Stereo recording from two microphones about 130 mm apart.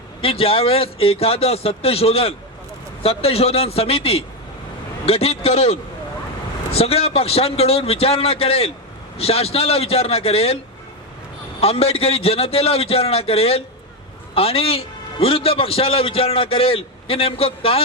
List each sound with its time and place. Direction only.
0.2 s a man's voice: 45° left (ahead or behind)
6.7 s a man's voice: 50° left (ahead or behind)
11.6 s a man's voice: 50° left (ahead or behind)